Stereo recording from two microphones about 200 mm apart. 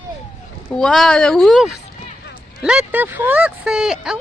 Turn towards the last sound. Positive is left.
turn(degrees=-5)  # may be behind; listen again after turning